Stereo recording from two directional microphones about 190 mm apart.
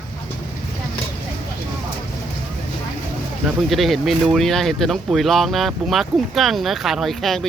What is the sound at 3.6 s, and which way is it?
Speech, centre (ahead or behind).